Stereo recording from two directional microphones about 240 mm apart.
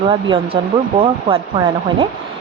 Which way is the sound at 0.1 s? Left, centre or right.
Right.